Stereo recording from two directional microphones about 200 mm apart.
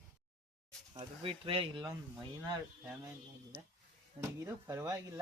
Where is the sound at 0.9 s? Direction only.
25° right (ahead or behind).